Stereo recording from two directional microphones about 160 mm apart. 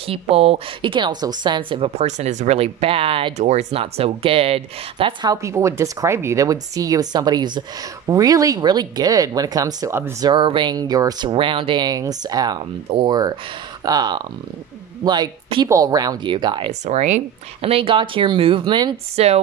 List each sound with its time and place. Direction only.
0.0 s a woman's voice: 35° right (ahead or behind)
5.3 s speech: 20° right (ahead or behind)
10.3 s speech: 30° right (ahead or behind)
16.8 s a woman's voice: 45° right (ahead or behind)